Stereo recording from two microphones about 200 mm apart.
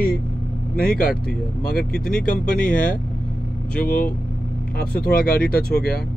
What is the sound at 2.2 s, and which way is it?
Speech, 40° left (ahead or behind).